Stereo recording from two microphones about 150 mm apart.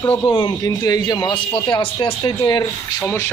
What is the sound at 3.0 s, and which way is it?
Speech, 15° left (ahead or behind).